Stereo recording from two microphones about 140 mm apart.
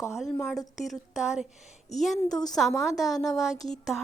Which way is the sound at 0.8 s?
Centre (ahead or behind).